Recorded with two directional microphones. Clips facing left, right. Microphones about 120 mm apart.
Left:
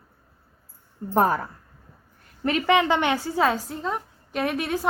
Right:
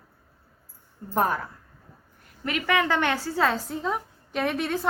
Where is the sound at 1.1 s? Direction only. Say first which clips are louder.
Left 4 dB; 35° left (ahead or behind).